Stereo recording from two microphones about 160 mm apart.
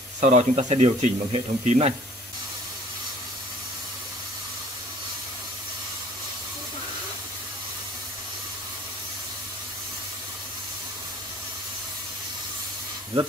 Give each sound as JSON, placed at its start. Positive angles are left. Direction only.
{"t": 0.2, "sound": "speech", "side_deg": -45}